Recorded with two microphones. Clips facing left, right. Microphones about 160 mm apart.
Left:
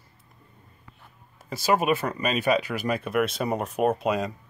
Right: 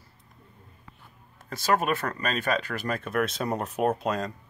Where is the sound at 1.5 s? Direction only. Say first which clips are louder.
Left 2 dB; 5° left (ahead or behind).